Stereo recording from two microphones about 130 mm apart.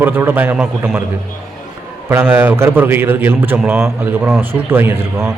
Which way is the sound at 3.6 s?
5° right (ahead or behind).